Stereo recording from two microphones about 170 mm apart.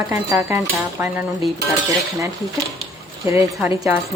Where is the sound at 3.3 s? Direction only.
15° right (ahead or behind).